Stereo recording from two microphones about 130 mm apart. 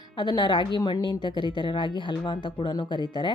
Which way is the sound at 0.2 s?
35° left (ahead or behind).